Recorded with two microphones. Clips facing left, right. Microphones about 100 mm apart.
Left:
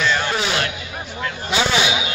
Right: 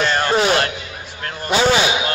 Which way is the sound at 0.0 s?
45° right (ahead or behind).